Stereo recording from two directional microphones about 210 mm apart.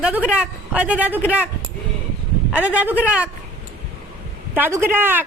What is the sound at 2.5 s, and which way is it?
Speech, 5° right (ahead or behind).